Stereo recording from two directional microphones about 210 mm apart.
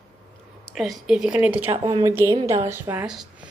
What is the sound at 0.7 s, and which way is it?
Speech, centre (ahead or behind).